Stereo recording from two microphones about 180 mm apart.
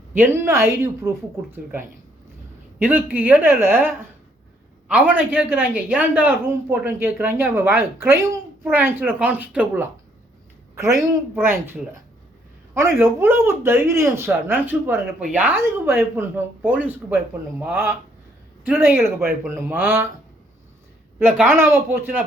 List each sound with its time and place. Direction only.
0.1 s speech: 10° right (ahead or behind)
13.0 s speech: 15° right (ahead or behind)
21.3 s speech: 10° right (ahead or behind)